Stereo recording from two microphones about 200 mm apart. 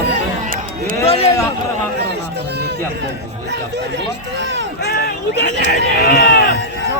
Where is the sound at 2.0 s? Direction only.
55° right (ahead or behind).